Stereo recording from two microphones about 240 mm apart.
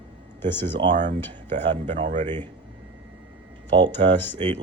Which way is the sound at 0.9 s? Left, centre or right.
Right.